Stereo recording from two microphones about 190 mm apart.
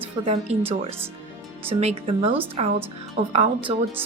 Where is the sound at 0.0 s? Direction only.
30° right (ahead or behind).